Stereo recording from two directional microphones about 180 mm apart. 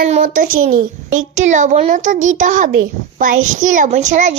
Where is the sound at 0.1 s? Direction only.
45° right (ahead or behind).